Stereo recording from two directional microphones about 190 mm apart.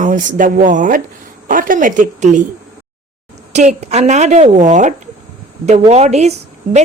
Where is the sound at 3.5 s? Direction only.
35° right (ahead or behind).